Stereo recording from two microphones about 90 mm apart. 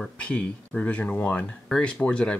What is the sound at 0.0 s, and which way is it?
Speech, 10° left (ahead or behind).